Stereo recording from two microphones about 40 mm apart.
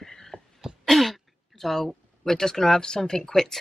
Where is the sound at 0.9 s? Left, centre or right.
Centre.